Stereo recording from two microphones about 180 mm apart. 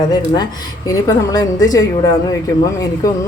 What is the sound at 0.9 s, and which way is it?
A woman's voice, 20° left (ahead or behind).